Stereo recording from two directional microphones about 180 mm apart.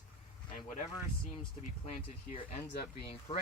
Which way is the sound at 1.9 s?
35° left (ahead or behind).